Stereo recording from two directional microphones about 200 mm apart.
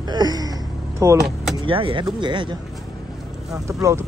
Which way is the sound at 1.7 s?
25° right (ahead or behind).